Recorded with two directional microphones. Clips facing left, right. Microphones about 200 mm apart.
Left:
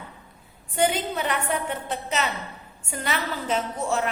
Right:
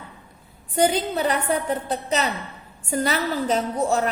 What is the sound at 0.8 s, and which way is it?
A woman's voice, 35° right (ahead or behind).